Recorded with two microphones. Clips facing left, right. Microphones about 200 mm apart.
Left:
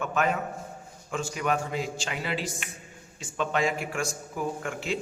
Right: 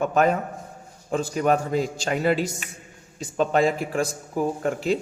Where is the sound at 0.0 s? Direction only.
40° right (ahead or behind).